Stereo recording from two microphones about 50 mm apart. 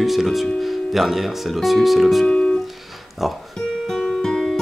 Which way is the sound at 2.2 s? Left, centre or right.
Centre.